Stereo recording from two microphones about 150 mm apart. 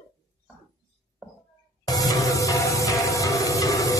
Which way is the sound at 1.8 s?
25° left (ahead or behind).